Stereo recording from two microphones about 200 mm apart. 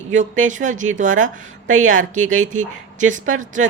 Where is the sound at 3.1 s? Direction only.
40° right (ahead or behind).